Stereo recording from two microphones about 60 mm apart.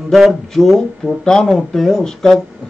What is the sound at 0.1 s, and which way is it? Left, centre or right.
Speech, centre.